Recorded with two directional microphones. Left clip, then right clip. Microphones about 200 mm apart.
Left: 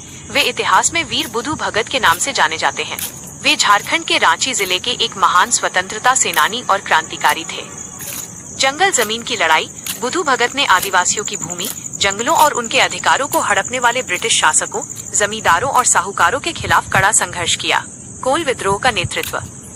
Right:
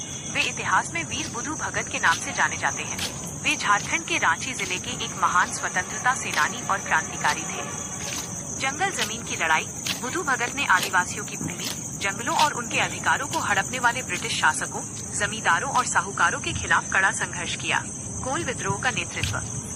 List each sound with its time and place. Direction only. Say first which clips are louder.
0.3 s speech: left 10 dB; 50° left (ahead or behind)
8.5 s speech: left 12 dB; 45° left (ahead or behind)